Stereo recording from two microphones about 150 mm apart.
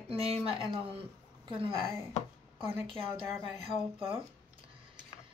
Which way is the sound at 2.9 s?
35° right (ahead or behind).